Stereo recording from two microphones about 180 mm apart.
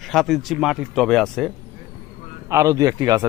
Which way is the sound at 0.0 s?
Centre (ahead or behind).